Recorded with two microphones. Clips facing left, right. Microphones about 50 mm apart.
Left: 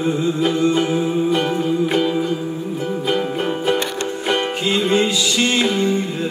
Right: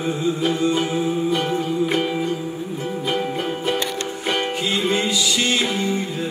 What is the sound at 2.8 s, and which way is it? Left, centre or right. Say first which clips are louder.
Music: left 3 dB; left.